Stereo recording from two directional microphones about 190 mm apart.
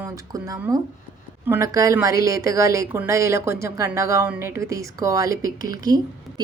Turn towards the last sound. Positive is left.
turn(degrees=-20)  # may be behind; listen again after turning